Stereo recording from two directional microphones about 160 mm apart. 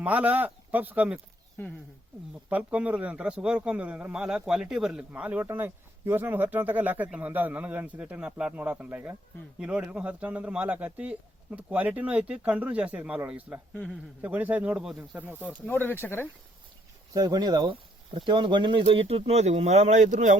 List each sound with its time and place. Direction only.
0.0 s a man's voice: 10° right (ahead or behind)
2.5 s a man's voice: 10° right (ahead or behind)
15.6 s speech: 10° left (ahead or behind)
17.2 s speech: 25° right (ahead or behind); by 20.4 s 50° right (ahead or behind)